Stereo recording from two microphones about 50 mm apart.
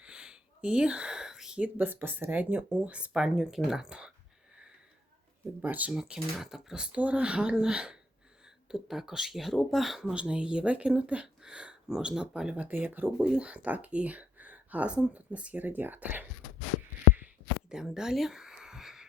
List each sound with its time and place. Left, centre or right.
0.0 s a sound: centre
1.5 s speech: right
2.6 s speech: right
5.6 s speech: right
5.9 s speech: centre
6.8 s speech: right
8.7 s speech: centre
10.2 s speech: centre
12.5 s speech: right
13.1 s speech: right
15.6 s speech: right
17.7 s a sound: centre